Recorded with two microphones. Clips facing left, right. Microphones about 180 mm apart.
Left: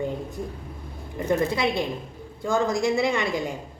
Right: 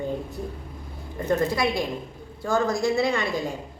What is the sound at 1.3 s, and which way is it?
A woman's voice, 25° left (ahead or behind).